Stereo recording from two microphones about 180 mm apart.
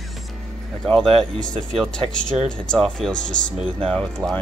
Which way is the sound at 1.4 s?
5° left (ahead or behind).